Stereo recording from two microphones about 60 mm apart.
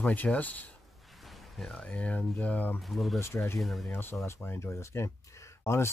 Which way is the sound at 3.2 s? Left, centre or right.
Left.